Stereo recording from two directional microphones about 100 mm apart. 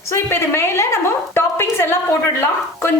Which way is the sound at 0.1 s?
25° left (ahead or behind).